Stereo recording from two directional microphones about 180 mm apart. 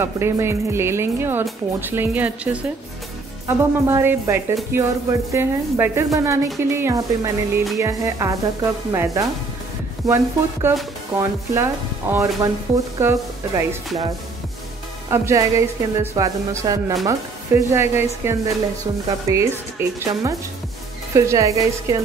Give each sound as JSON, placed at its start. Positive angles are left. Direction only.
{"t": 0.0, "sound": "speech", "side_deg": -15}
{"t": 15.0, "sound": "speech", "side_deg": -15}